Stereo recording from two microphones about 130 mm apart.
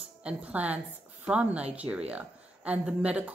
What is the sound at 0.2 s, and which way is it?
A woman's voice, 10° right (ahead or behind).